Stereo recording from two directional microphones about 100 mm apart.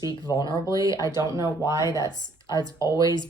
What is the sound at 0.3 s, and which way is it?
Speech, 40° left (ahead or behind).